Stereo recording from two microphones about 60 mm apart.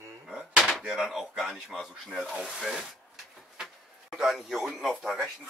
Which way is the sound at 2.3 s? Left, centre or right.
Centre.